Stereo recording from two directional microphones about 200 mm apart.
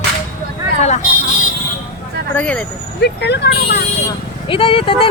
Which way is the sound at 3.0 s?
55° left (ahead or behind).